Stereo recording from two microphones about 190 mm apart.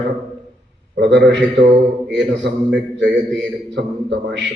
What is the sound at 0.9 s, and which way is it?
A man's voice, 65° right (ahead or behind).